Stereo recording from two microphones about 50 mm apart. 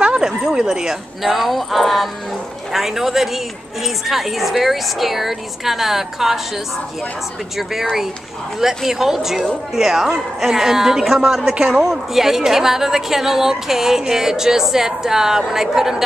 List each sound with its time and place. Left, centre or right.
0.0 s a sound: centre
0.5 s a woman's voice: centre
8.5 s a woman's voice: centre